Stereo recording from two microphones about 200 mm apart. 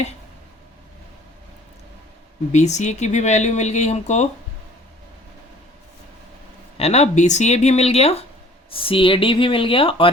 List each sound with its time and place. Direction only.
2.5 s speech: 35° left (ahead or behind)
6.7 s speech: 30° left (ahead or behind)